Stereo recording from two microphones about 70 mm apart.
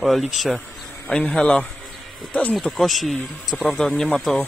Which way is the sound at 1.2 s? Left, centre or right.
Centre.